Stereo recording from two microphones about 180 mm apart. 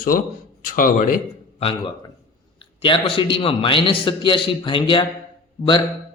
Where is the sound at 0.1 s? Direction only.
55° left (ahead or behind).